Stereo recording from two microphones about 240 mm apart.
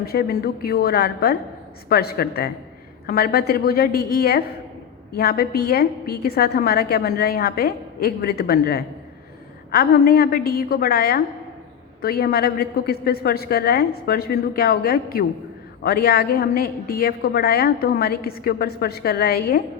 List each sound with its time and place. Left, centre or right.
0.0 s a woman's voice: left